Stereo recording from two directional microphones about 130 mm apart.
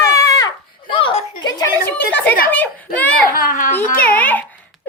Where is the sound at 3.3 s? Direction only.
90° left.